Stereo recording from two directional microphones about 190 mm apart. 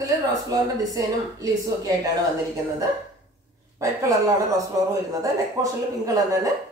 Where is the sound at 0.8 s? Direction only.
20° right (ahead or behind).